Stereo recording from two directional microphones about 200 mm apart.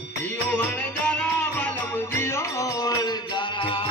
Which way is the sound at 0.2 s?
10° left (ahead or behind).